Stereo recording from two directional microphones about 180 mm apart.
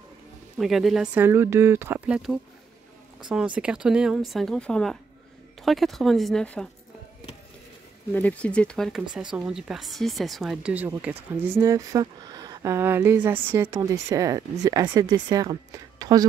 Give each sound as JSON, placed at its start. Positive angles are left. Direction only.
{"t": 0.6, "sound": "speech", "side_deg": 0}
{"t": 8.1, "sound": "speech", "side_deg": 10}